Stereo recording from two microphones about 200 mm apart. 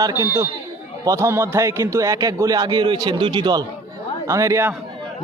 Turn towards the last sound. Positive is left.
turn(degrees=-15)  # may be behind; listen again after turning